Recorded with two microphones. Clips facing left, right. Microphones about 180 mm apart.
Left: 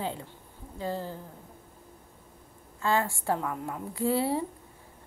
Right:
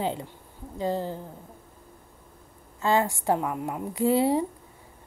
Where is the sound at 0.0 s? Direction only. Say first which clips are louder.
Right 5 dB; 20° right (ahead or behind).